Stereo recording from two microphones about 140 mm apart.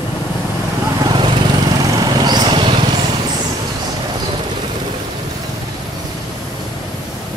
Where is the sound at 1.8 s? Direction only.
30° right (ahead or behind).